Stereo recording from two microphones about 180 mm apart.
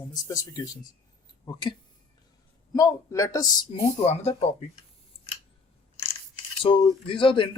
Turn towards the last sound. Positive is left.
turn(degrees=30)  # may be behind; listen again after turning